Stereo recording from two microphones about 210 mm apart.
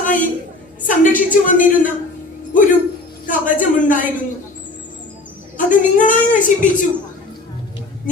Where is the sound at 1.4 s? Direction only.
40° left (ahead or behind).